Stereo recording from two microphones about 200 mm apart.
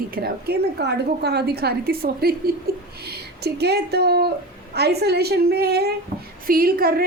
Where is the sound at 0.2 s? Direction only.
55° right (ahead or behind).